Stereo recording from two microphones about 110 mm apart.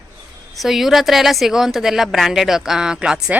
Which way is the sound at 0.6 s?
5° right (ahead or behind).